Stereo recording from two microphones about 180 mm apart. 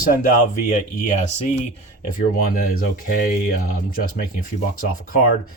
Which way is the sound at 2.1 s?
55° left (ahead or behind).